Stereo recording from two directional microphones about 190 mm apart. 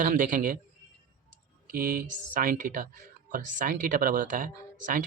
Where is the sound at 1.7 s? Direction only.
50° right (ahead or behind).